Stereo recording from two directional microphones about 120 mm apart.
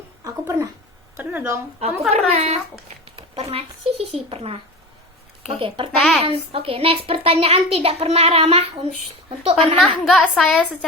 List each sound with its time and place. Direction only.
0.3 s speech: 25° right (ahead or behind)
1.1 s speech: 15° right (ahead or behind)
1.8 s a child's voice: 65° right (ahead or behind)
3.2 s a child's voice: 55° right (ahead or behind)
5.5 s a child's voice: 50° right (ahead or behind)
6.0 s a woman's voice: 5° left (ahead or behind)
6.2 s a child's voice: 50° right (ahead or behind)
9.8 s a woman's voice: centre (ahead or behind)